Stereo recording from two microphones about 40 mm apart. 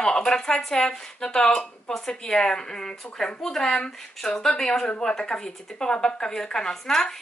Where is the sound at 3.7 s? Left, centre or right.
Centre.